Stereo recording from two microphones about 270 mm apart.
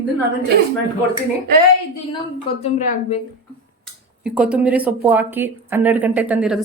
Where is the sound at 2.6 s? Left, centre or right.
Left.